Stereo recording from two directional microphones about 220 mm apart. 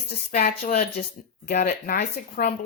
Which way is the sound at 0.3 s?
35° left (ahead or behind).